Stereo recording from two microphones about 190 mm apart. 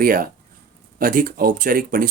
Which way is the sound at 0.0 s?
50° right (ahead or behind).